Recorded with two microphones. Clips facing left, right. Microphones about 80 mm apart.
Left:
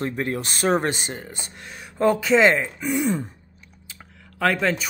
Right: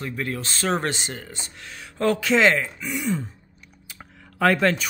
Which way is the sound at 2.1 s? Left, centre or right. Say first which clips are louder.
Left 1 dB; centre.